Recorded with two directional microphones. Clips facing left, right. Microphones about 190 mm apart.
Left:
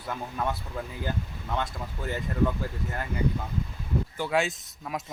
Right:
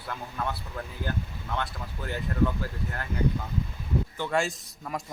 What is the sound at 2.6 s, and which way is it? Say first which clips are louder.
Speech: left 1 dB; 15° left (ahead or behind).